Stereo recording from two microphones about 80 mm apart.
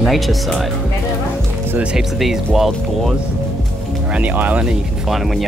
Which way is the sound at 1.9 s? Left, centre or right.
Centre.